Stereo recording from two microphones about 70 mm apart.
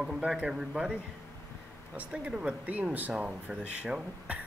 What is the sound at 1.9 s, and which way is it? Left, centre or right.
Speech, right.